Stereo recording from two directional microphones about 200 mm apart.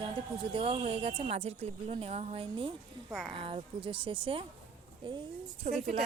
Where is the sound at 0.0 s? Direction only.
25° right (ahead or behind).